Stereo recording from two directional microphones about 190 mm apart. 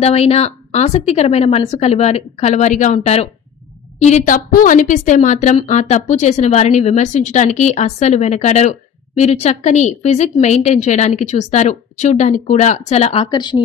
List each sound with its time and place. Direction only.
0.0 s a woman's voice: 35° left (ahead or behind)